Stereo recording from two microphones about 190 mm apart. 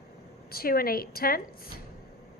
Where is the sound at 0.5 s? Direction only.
50° left (ahead or behind).